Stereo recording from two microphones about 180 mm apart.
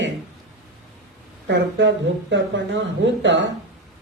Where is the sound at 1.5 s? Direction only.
75° right (ahead or behind).